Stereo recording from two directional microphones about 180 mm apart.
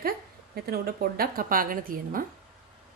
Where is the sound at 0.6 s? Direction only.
60° right (ahead or behind).